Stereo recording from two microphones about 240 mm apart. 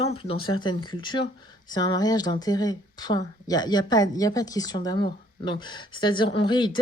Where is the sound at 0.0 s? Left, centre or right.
Left.